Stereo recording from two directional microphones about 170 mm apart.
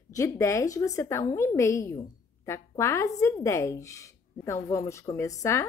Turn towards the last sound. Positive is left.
turn(degrees=15)  # may be behind; listen again after turning